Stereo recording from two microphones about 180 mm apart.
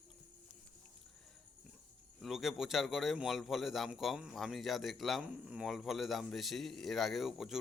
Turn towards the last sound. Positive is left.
turn(degrees=0)  # may be behind; listen again after turning